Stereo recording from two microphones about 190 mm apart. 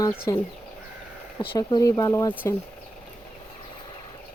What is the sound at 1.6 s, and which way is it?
Speech, 20° left (ahead or behind).